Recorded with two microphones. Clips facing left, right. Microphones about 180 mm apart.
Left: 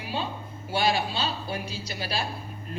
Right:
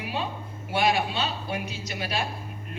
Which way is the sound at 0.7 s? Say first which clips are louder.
Right 1 dB; 30° left (ahead or behind).